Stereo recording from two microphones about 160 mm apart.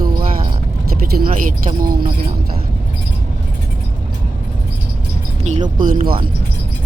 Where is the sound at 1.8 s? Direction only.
65° right (ahead or behind).